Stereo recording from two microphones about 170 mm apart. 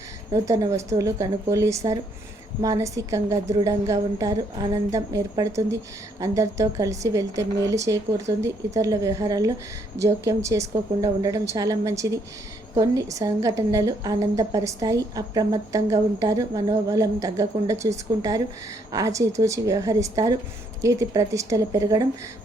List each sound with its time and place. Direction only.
0.3 s a woman's voice: 20° right (ahead or behind)